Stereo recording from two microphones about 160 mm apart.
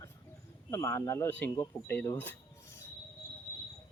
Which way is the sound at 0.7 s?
20° left (ahead or behind).